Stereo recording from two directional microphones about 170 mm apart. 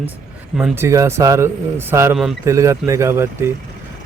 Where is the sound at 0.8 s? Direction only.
15° right (ahead or behind).